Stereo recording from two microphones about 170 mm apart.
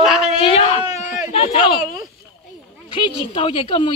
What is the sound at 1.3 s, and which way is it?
Speech, 35° left (ahead or behind).